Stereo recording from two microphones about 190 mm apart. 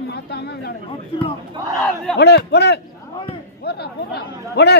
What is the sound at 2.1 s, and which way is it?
Speech, 60° left (ahead or behind).